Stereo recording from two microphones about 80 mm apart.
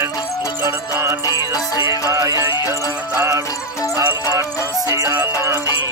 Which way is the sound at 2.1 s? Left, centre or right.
Right.